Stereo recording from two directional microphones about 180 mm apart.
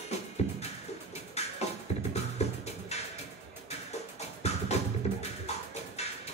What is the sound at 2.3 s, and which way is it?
Music, 35° left (ahead or behind).